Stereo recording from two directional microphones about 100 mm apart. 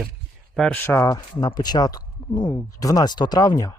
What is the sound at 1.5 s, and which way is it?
Speech, 45° left (ahead or behind).